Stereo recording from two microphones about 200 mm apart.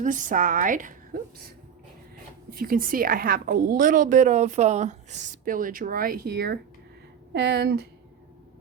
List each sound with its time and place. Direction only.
0.0 s a woman's voice: 40° right (ahead or behind)
2.5 s a woman's voice: 45° right (ahead or behind)